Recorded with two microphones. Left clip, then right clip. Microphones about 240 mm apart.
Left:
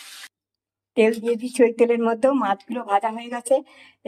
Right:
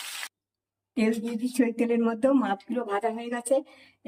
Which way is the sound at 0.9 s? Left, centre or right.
Centre.